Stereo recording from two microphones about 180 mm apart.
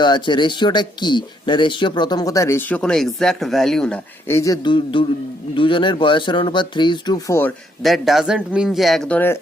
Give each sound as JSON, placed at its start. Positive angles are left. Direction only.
{"t": 0.0, "sound": "speech", "side_deg": 25}
{"t": 7.8, "sound": "speech", "side_deg": 0}